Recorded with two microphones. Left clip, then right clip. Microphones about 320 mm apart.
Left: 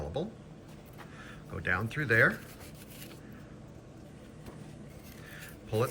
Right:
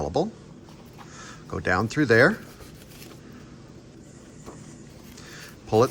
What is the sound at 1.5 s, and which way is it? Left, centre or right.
Speech, centre.